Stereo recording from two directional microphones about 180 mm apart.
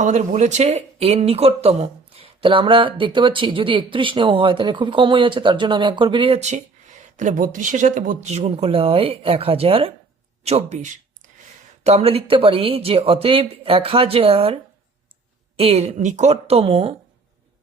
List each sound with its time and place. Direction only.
0.0 s speech: 40° right (ahead or behind)